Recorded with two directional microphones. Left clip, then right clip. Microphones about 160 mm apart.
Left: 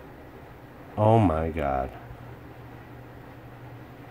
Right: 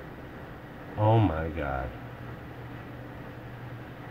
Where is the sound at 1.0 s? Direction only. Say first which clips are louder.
Left 4 dB; 50° left (ahead or behind).